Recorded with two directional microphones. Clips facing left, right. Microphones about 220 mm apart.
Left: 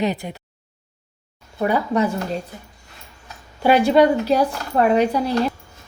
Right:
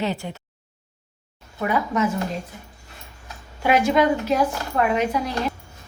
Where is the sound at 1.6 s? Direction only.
35° left (ahead or behind).